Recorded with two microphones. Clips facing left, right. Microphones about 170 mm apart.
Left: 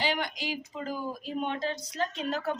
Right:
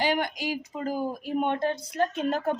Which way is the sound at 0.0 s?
50° right (ahead or behind).